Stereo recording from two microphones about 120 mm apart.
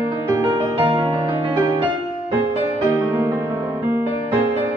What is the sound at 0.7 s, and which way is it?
Music, 55° right (ahead or behind).